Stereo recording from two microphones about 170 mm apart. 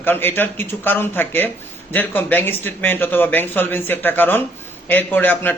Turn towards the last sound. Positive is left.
turn(degrees=10)  # may be behind; listen again after turning